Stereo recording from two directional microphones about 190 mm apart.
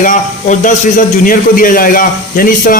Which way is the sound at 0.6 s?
45° left (ahead or behind).